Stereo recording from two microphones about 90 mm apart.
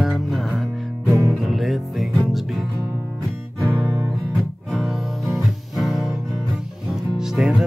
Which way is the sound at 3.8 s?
50° right (ahead or behind).